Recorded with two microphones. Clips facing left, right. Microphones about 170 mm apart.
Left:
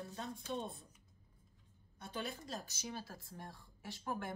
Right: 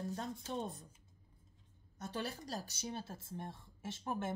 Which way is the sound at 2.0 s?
40° right (ahead or behind).